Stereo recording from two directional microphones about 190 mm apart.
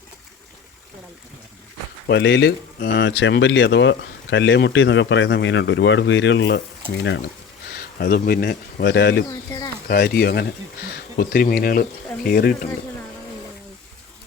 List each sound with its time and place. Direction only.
2.0 s speech: 65° left (ahead or behind)